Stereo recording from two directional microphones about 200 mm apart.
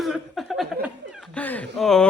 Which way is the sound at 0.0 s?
Centre (ahead or behind).